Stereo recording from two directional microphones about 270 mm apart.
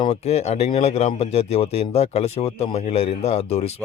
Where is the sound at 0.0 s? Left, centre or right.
Left.